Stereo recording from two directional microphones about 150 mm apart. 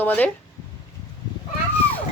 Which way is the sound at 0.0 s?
10° left (ahead or behind).